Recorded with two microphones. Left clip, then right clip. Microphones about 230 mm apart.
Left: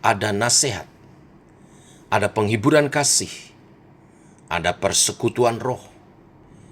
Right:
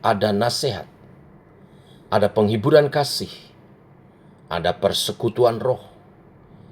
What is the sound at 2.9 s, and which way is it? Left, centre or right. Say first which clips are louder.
Speech: left 1 dB; left.